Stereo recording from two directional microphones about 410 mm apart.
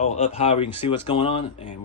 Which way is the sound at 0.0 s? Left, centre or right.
Centre.